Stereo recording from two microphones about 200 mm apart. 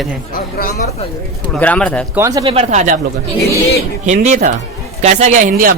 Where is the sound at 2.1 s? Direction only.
15° right (ahead or behind).